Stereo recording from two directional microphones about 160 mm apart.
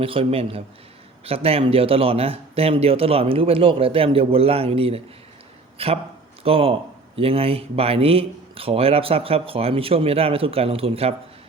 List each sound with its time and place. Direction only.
0.0 s a man's voice: 35° right (ahead or behind)